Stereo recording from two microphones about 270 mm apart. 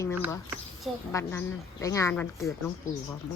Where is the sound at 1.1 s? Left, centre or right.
Centre.